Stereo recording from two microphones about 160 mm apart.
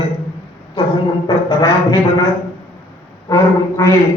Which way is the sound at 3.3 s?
20° left (ahead or behind).